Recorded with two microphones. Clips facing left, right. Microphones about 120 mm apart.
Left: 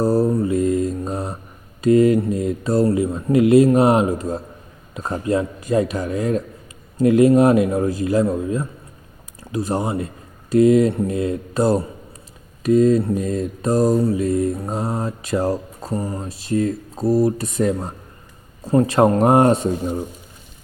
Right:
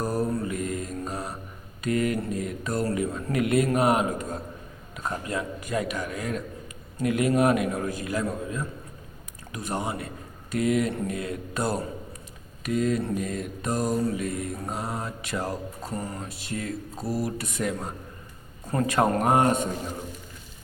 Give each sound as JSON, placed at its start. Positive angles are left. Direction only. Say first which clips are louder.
{"t": 0.0, "sound": "mantra", "louder": "left 9 dB", "side_deg": 35}
{"t": 7.0, "sound": "a man's voice", "louder": "left 9 dB", "side_deg": 30}
{"t": 10.5, "sound": "mantra", "louder": "left 11 dB", "side_deg": 35}